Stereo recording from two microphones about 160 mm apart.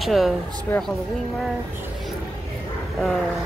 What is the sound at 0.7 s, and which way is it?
Speech, 10° left (ahead or behind).